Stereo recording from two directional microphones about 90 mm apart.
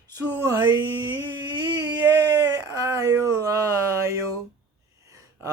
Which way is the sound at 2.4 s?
40° right (ahead or behind).